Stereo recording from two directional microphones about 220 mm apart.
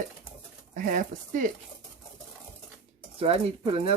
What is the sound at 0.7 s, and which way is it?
Speech, 35° right (ahead or behind).